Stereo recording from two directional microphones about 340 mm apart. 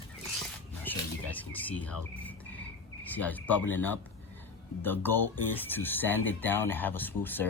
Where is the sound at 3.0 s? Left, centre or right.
Centre.